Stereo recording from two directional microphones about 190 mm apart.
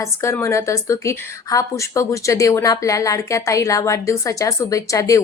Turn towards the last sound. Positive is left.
turn(degrees=15)  # may be behind; listen again after turning